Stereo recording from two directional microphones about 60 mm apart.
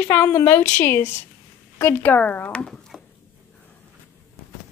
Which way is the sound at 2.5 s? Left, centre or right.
Centre.